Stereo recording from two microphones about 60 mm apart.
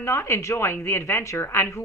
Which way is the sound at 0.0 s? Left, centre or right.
Left.